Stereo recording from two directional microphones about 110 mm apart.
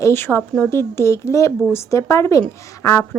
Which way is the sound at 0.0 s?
20° left (ahead or behind).